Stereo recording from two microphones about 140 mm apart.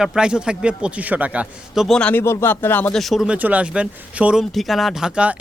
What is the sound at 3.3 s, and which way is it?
Speech, 10° right (ahead or behind).